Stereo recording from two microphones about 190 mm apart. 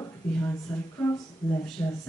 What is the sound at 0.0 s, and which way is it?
Speech, 10° left (ahead or behind).